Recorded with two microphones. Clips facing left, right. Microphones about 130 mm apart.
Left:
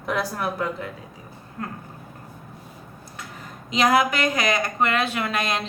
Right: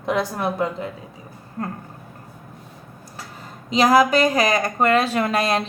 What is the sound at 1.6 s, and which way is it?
Speech, 35° right (ahead or behind).